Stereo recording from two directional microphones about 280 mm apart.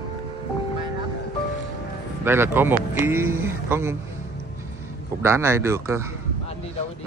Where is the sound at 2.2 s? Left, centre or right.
Centre.